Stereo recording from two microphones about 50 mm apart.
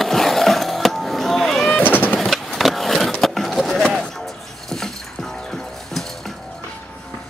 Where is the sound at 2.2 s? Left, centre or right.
Centre.